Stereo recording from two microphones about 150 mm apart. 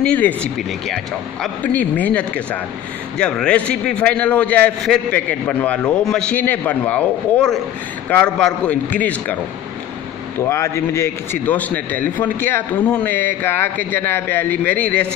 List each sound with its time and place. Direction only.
0.0 s a man's voice: 10° left (ahead or behind)
10.4 s a man's voice: 20° left (ahead or behind)